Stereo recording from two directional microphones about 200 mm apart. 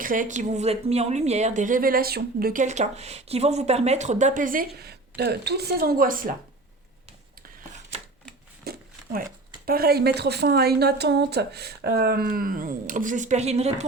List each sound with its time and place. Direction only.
0.0 s a woman's voice: 40° right (ahead or behind)
8.7 s a sound: 50° right (ahead or behind)
9.6 s a woman's voice: 50° right (ahead or behind); by 13.8 s 35° right (ahead or behind)